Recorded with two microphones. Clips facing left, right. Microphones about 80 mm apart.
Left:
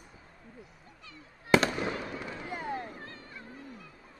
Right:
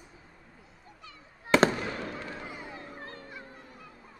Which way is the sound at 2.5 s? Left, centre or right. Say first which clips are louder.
Left 6 dB; left.